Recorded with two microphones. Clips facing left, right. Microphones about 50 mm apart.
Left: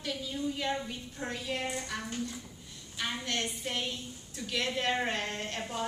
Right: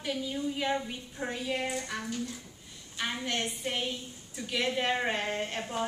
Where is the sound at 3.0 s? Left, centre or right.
Centre.